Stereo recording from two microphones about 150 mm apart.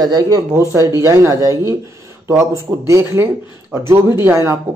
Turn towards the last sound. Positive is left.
turn(degrees=-20)  # may be behind; listen again after turning